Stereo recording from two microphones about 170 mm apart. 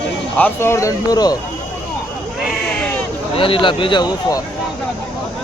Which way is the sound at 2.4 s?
5° left (ahead or behind).